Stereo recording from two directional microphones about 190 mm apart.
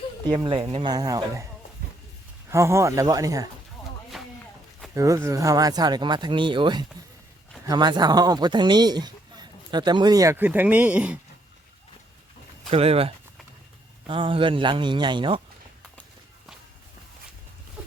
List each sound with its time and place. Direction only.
0.3 s speech: 25° right (ahead or behind)
2.5 s speech: 15° right (ahead or behind)
4.9 s speech: 15° right (ahead or behind)
12.7 s speech: 30° right (ahead or behind)